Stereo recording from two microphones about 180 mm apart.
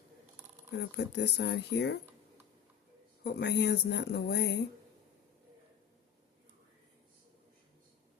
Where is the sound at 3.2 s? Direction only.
65° left (ahead or behind).